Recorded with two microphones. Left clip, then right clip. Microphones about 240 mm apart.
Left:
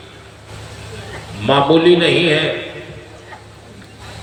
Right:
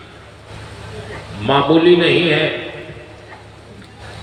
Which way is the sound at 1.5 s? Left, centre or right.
Left.